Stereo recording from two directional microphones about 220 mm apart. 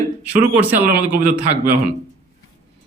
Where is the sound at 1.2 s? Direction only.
35° right (ahead or behind).